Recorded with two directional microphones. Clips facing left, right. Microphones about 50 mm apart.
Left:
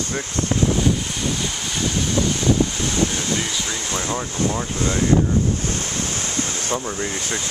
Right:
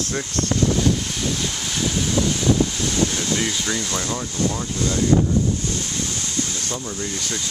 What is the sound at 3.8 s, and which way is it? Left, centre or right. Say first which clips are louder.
Speech: left 1 dB; left.